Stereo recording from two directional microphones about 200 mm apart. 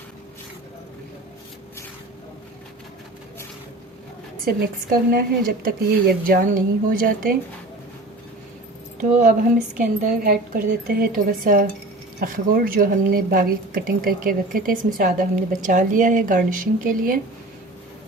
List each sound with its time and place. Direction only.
4.4 s speech: 45° right (ahead or behind)
9.7 s speech: 45° right (ahead or behind)